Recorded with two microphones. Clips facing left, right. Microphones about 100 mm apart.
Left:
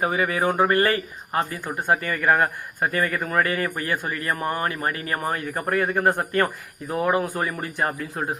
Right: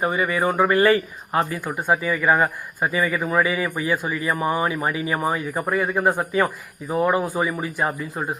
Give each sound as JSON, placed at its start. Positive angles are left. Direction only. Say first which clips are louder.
{"t": 0.0, "sound": "speech", "louder": "right 1 dB", "side_deg": 5}
{"t": 0.9, "sound": "speech", "louder": "right 5 dB", "side_deg": -25}
{"t": 2.0, "sound": "speech", "louder": "right 2 dB", "side_deg": -5}